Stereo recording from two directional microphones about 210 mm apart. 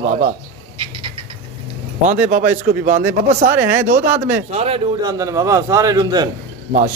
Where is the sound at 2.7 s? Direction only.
40° right (ahead or behind).